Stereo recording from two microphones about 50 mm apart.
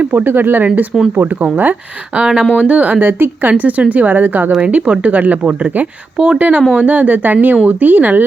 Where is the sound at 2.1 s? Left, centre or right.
Centre; by 4.5 s right.